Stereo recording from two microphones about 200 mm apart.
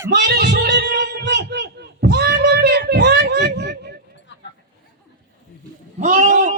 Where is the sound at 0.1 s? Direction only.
55° right (ahead or behind).